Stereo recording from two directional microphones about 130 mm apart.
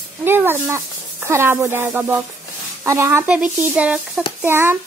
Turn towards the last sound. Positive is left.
turn(degrees=-15)  # may be behind; listen again after turning